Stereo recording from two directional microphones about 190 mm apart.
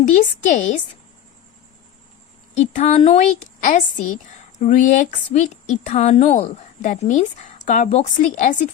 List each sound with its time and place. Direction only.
0.1 s a woman's voice: 40° left (ahead or behind)
2.6 s a woman's voice: 35° left (ahead or behind)